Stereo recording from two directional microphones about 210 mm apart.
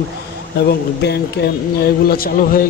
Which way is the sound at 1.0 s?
55° left (ahead or behind).